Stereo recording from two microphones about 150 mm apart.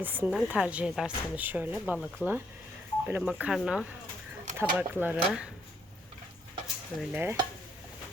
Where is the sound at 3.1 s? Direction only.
10° right (ahead or behind).